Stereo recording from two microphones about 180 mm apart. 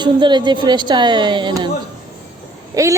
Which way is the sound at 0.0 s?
25° right (ahead or behind).